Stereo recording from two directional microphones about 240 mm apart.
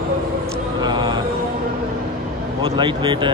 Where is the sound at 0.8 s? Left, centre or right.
Centre.